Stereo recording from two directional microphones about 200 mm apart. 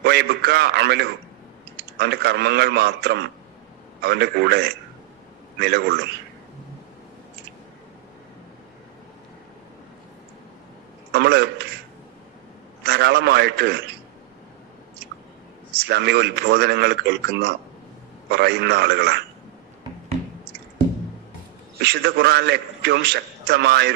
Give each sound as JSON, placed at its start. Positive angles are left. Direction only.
{"t": 0.0, "sound": "a man's voice", "side_deg": -55}
{"t": 11.1, "sound": "a man's voice", "side_deg": -55}
{"t": 12.8, "sound": "a man's voice", "side_deg": -55}
{"t": 15.8, "sound": "a man's voice", "side_deg": -55}
{"t": 21.8, "sound": "a man's voice", "side_deg": -55}